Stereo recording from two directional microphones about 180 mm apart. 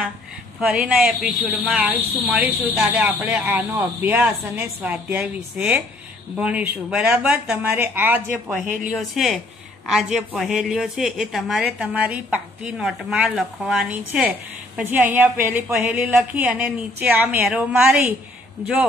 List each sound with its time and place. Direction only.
0.6 s speech: 5° right (ahead or behind)
8.6 s speech: 50° right (ahead or behind)
8.9 s a woman's voice: centre (ahead or behind)